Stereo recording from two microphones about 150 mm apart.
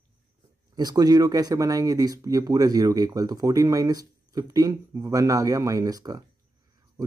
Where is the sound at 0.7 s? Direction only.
25° right (ahead or behind).